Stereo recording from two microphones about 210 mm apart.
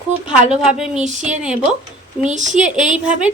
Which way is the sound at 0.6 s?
5° right (ahead or behind).